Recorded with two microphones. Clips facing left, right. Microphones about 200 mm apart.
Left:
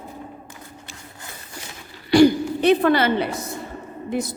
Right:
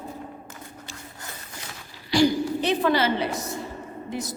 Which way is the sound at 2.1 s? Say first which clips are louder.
Left 6 dB; 55° left (ahead or behind).